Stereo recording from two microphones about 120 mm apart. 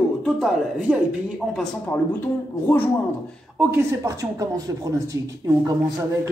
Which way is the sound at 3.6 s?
20° right (ahead or behind).